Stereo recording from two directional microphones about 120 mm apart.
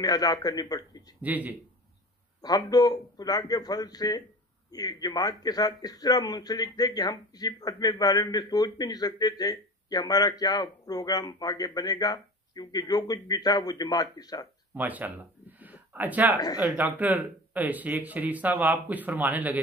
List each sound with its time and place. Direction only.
0.0 s a man's voice: 30° left (ahead or behind)
1.2 s speech: 15° right (ahead or behind)
2.4 s a man's voice: 30° left (ahead or behind)
14.7 s speech: 15° right (ahead or behind)